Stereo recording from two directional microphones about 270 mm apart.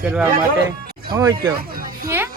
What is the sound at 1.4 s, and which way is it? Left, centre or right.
Speech, right.